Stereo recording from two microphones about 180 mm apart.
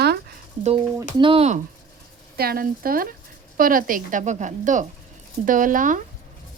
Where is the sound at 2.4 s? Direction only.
55° right (ahead or behind).